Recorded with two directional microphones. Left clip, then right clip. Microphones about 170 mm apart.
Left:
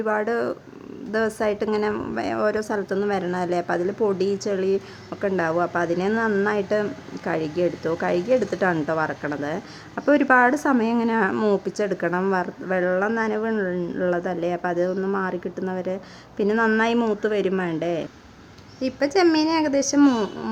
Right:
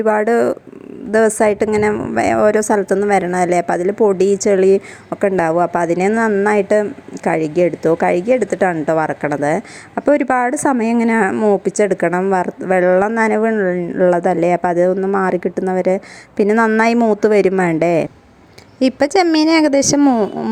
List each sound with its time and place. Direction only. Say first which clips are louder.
0.0 s a woman's voice: right 9 dB; 30° right (ahead or behind)
11.3 s speech: right 7 dB; 15° right (ahead or behind)
11.6 s a woman's voice: right 9 dB; 35° right (ahead or behind)
20.0 s speech: right 5 dB; 25° right (ahead or behind)